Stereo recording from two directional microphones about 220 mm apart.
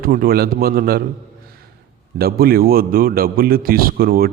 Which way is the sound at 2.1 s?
45° right (ahead or behind).